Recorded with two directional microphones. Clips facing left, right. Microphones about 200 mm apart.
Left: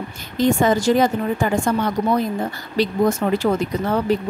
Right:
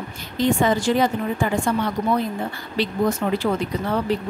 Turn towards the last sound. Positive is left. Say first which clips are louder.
# left 3 dB
turn(degrees=45)  # may be behind; listen again after turning